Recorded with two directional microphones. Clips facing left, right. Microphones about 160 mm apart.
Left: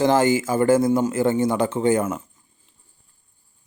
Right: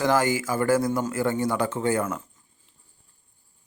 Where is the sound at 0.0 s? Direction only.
25° left (ahead or behind).